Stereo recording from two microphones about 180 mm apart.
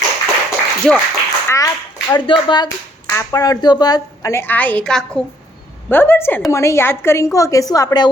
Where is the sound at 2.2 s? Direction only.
25° left (ahead or behind).